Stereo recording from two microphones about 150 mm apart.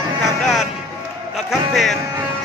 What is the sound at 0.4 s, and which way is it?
Vehicle, centre (ahead or behind).